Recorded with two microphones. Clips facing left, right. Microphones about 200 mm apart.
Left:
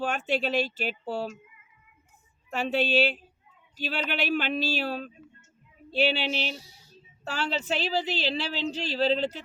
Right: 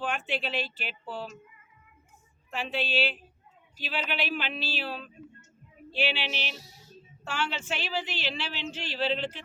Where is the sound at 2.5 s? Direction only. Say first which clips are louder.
Left 6 dB; 45° left (ahead or behind).